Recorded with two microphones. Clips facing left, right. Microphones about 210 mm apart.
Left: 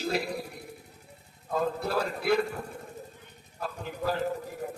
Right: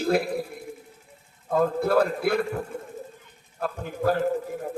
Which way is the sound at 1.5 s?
55° right (ahead or behind).